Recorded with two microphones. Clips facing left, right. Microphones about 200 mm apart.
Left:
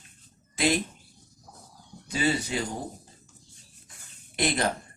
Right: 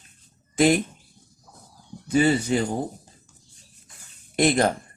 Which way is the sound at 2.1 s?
50° right (ahead or behind).